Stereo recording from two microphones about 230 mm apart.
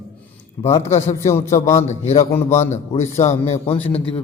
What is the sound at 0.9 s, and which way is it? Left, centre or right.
Speech, left.